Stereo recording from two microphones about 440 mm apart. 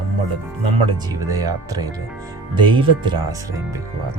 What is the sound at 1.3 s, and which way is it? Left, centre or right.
Speech, centre.